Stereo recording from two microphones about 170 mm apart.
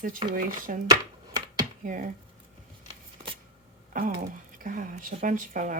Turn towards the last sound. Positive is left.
turn(degrees=-50)  # may be behind; listen again after turning